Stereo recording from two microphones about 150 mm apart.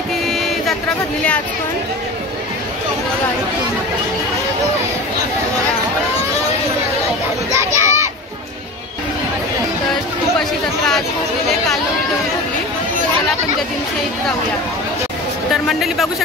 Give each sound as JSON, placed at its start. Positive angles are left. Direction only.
{"t": 0.3, "sound": "a sound", "side_deg": 0}
{"t": 7.5, "sound": "children playing", "side_deg": -20}
{"t": 15.5, "sound": "speech", "side_deg": 0}